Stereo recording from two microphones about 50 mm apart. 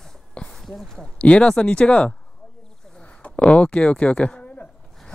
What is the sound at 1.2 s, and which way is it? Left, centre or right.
Speech, left.